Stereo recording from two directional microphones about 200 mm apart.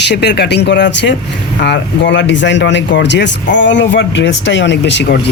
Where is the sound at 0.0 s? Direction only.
60° left (ahead or behind).